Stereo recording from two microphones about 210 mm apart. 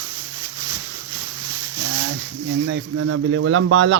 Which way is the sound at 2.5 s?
65° right (ahead or behind).